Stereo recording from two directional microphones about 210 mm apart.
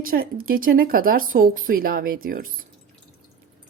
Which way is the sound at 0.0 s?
45° right (ahead or behind).